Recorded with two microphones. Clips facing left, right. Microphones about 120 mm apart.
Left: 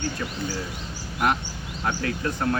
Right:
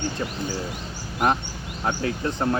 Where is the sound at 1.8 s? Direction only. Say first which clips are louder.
Right 1 dB; 25° right (ahead or behind).